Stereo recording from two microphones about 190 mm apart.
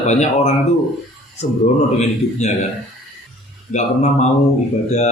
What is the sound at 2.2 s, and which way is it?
Speech, 35° left (ahead or behind).